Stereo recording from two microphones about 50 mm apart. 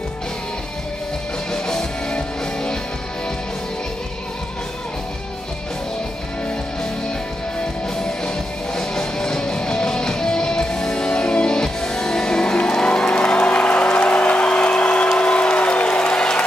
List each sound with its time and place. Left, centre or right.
1.5 s music: centre
8.7 s music: centre